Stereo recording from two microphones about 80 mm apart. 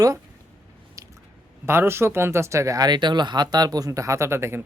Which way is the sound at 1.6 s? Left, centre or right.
Right.